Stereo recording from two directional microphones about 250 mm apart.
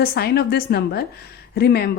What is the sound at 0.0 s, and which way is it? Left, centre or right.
A woman's voice, left.